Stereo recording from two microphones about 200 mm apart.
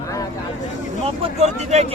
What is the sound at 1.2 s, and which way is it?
Speech, 35° right (ahead or behind).